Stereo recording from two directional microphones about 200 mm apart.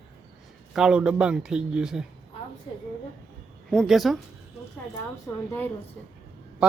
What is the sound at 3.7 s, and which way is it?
Speech, centre (ahead or behind).